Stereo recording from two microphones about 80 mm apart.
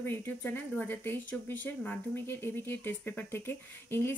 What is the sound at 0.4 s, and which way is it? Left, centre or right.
Speech, left.